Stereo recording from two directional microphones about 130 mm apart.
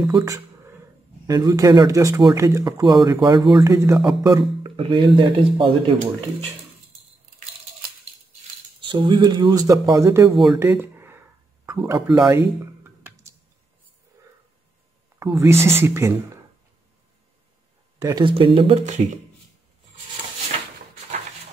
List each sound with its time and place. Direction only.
0.0 s speech: 25° right (ahead or behind)
3.6 s speech: 25° right (ahead or behind)
4.7 s speech: 40° right (ahead or behind)
8.8 s speech: 40° right (ahead or behind); by 10.3 s 25° right (ahead or behind)
10.3 s speech: centre (ahead or behind)
10.6 s speech: 15° right (ahead or behind)
12.3 s a sound: 20° right (ahead or behind)
15.3 s speech: 20° right (ahead or behind)
17.9 s speech: 30° right (ahead or behind)
18.3 s speech: 40° right (ahead or behind)